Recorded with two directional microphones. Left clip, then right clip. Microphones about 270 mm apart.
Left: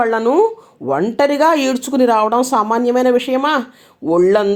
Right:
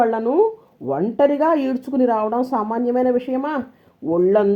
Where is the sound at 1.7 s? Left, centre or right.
Left.